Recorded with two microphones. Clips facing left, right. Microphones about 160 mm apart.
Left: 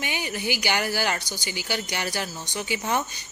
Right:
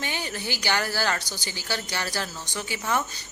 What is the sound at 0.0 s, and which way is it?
A woman's voice, 15° left (ahead or behind).